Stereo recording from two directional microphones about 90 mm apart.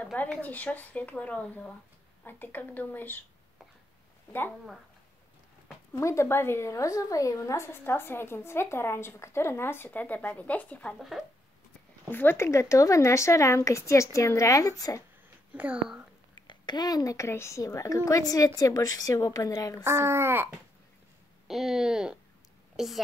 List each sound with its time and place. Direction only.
0.0 s a woman's voice: 15° left (ahead or behind)
4.3 s a woman's voice: 25° left (ahead or behind)
5.9 s a woman's voice: 30° left (ahead or behind); by 11.0 s 15° left (ahead or behind)
11.0 s speech: centre (ahead or behind)
12.1 s a woman's voice: 25° left (ahead or behind); by 15.0 s 40° left (ahead or behind)
15.5 s speech: 15° right (ahead or behind)
16.4 s a woman's voice: 50° left (ahead or behind)
19.8 s speech: 30° right (ahead or behind)
21.5 s speech: centre (ahead or behind)